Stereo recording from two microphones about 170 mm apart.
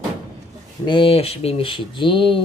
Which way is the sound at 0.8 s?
30° left (ahead or behind).